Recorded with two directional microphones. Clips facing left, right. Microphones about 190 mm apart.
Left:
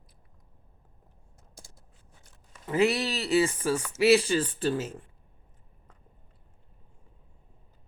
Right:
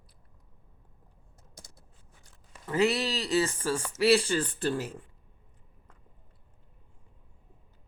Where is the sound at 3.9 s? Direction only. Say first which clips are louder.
Left 2 dB; 20° left (ahead or behind).